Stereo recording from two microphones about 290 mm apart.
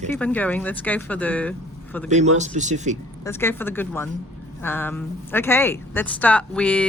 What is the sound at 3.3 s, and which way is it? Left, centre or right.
Speech, centre.